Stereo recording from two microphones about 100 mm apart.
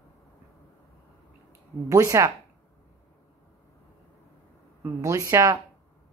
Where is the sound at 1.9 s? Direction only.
30° right (ahead or behind).